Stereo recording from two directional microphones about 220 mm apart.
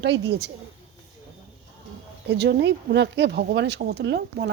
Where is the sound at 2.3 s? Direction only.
50° right (ahead or behind).